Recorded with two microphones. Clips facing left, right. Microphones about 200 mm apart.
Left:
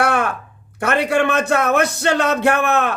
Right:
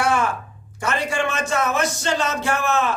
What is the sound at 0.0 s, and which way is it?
A man's voice, 60° left (ahead or behind).